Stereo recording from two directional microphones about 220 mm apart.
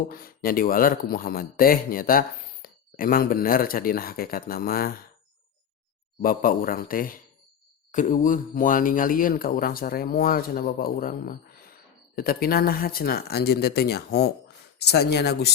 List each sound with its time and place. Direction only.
0.1 s speech: 40° left (ahead or behind)
6.2 s speech: 40° left (ahead or behind)